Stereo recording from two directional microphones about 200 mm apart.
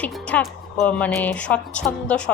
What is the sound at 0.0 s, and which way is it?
A woman's voice, 5° left (ahead or behind).